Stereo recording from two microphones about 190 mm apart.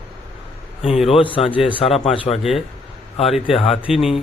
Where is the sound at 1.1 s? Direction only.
25° left (ahead or behind).